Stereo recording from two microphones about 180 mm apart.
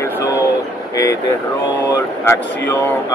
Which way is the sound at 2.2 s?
15° left (ahead or behind).